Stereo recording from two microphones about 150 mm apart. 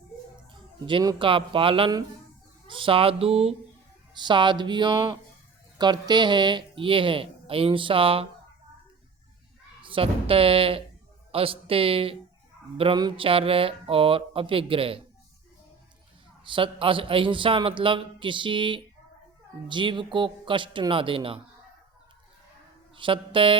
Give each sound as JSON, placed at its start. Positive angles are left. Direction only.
{"t": 0.9, "sound": "speech", "side_deg": -35}
{"t": 4.1, "sound": "speech", "side_deg": -30}
{"t": 9.8, "sound": "speech", "side_deg": -35}
{"t": 16.5, "sound": "speech", "side_deg": -35}
{"t": 23.0, "sound": "speech", "side_deg": -35}